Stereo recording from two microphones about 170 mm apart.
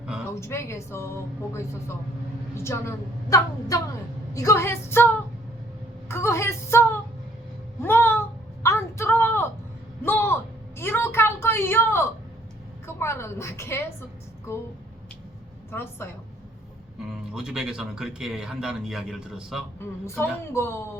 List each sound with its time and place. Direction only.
0.0 s a sound: 5° right (ahead or behind)
0.3 s speech: 15° left (ahead or behind)
6.1 s a sound: 15° left (ahead or behind)
13.0 s a woman's voice: 15° left (ahead or behind)
15.7 s speech: 15° left (ahead or behind)
17.1 s speech: 5° right (ahead or behind)
20.1 s speech: 15° left (ahead or behind)